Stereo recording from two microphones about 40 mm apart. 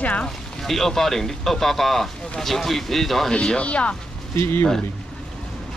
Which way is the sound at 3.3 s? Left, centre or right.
Left.